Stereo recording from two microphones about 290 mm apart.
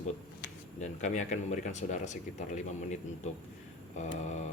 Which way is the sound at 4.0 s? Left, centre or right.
Left.